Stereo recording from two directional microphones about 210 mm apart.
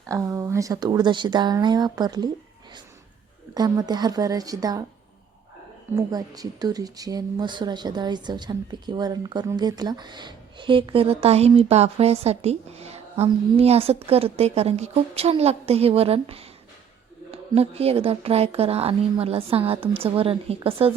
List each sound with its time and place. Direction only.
0.1 s speech: 15° right (ahead or behind)
3.5 s a woman's voice: 20° right (ahead or behind)
6.0 s speech: 20° right (ahead or behind)